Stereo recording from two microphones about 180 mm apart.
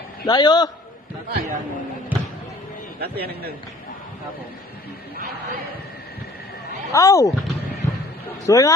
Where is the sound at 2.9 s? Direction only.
60° right (ahead or behind).